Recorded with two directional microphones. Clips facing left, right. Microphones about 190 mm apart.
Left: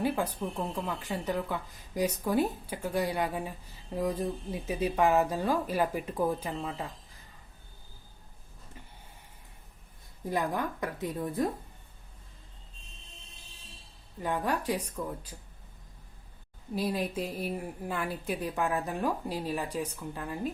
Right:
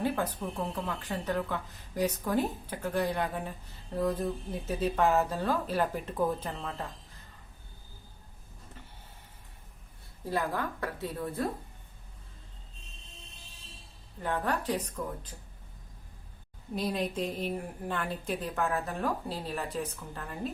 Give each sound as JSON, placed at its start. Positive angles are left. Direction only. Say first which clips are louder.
{"t": 0.0, "sound": "a woman's voice", "louder": "left 1 dB", "side_deg": 10}
{"t": 10.2, "sound": "a woman's voice", "louder": "left 1 dB", "side_deg": 15}
{"t": 14.2, "sound": "a woman's voice", "louder": "left 1 dB", "side_deg": 10}
{"t": 16.7, "sound": "a woman's voice", "louder": "left 1 dB", "side_deg": 5}